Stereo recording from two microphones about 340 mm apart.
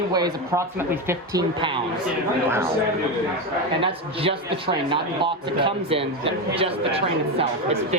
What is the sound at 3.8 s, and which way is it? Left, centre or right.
A man's voice, centre.